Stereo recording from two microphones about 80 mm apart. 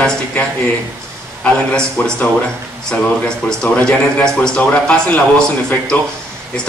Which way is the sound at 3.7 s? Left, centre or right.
Centre.